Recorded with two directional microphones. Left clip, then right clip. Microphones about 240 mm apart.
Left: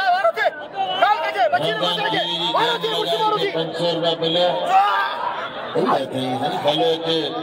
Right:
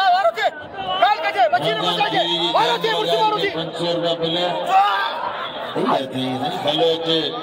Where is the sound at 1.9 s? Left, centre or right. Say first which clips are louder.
Right 2 dB; left.